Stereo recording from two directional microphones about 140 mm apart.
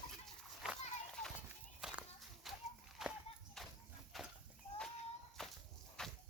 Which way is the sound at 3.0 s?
Centre (ahead or behind).